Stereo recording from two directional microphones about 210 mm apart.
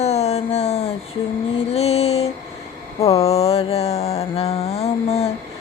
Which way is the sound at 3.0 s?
30° left (ahead or behind).